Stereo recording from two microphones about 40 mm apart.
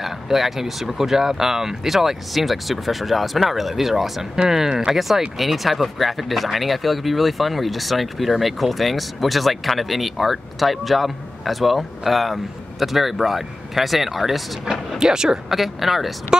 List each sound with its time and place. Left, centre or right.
0.0 s speech: centre
15.0 s speech: centre
15.5 s speech: centre